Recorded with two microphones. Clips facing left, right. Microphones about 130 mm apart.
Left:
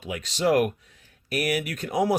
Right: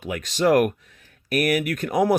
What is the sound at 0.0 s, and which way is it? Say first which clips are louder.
Speech: right 4 dB; 55° right (ahead or behind).